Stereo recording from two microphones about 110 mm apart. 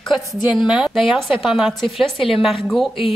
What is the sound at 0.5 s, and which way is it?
A woman's voice, 5° right (ahead or behind).